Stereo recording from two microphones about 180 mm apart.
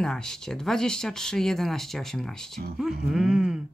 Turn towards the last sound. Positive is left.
turn(degrees=-5)  # may be behind; listen again after turning